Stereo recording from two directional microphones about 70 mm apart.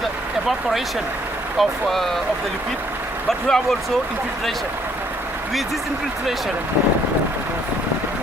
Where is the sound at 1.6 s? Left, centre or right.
Centre.